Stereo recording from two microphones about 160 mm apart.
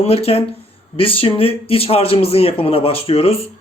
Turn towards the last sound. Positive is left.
turn(degrees=35)  # may be behind; listen again after turning